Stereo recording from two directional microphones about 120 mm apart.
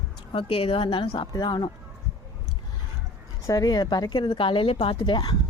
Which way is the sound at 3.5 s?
30° left (ahead or behind).